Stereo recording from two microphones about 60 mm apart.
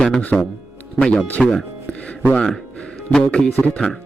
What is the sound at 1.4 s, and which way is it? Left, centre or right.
A man's voice, centre.